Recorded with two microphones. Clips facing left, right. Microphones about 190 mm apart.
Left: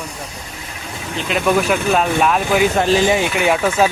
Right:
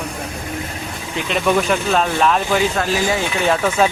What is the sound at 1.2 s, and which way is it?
Speech, centre (ahead or behind).